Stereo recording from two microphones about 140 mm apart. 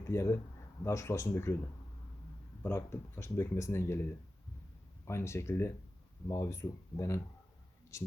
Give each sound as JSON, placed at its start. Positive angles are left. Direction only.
{"t": 0.1, "sound": "speech", "side_deg": 20}
{"t": 2.6, "sound": "speech", "side_deg": 20}